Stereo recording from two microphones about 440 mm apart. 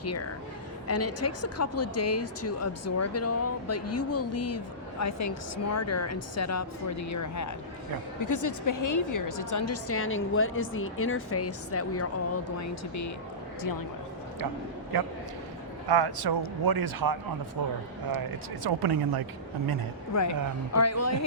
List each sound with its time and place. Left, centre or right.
0.0 s speech: left
14.9 s a man's voice: right
20.1 s speech: left